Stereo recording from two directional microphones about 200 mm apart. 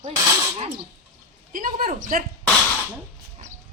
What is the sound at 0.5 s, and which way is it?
Sneeze, 30° right (ahead or behind).